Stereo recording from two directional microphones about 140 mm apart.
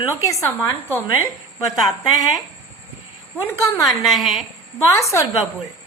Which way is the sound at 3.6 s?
20° left (ahead or behind).